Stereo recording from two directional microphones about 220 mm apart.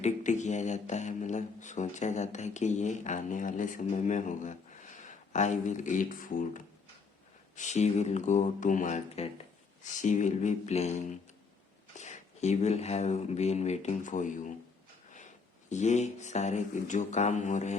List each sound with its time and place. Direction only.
0.0 s speech: 35° left (ahead or behind)
15.7 s speech: 30° left (ahead or behind)